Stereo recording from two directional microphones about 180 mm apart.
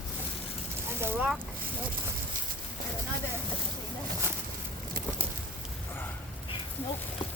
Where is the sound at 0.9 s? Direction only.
10° right (ahead or behind).